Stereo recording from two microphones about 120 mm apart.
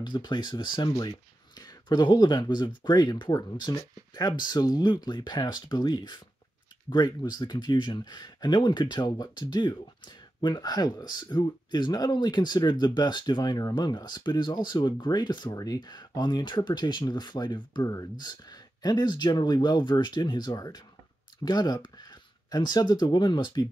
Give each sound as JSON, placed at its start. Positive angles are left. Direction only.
{"t": 0.0, "sound": "speech", "side_deg": 40}